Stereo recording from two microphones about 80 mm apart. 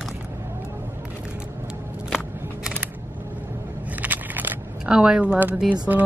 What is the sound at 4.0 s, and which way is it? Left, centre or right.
Crackle, right.